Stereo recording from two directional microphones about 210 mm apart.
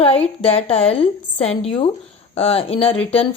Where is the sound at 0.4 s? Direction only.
25° left (ahead or behind).